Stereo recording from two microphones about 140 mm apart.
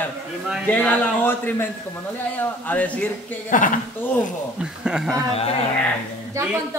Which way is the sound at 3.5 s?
70° left (ahead or behind).